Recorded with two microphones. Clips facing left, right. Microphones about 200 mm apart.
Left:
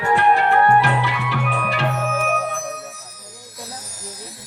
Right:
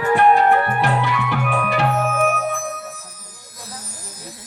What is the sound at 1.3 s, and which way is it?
Music, 55° right (ahead or behind).